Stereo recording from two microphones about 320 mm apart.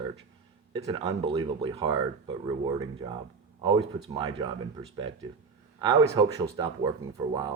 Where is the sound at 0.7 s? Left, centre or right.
Centre.